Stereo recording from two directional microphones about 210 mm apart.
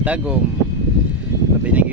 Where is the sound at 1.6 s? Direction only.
5° right (ahead or behind).